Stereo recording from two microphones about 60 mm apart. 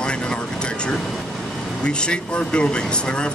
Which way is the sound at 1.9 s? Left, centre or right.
Centre.